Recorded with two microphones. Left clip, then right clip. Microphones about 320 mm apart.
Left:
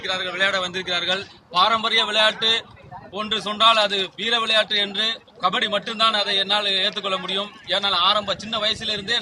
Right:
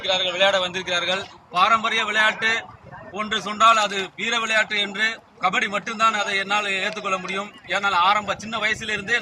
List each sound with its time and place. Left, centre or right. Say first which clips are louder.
0.0 s a man's voice: right 3 dB; centre